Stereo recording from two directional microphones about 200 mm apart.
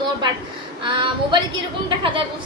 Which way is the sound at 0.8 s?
25° right (ahead or behind).